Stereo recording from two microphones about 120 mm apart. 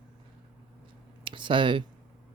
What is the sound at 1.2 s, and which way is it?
Speech, 45° right (ahead or behind).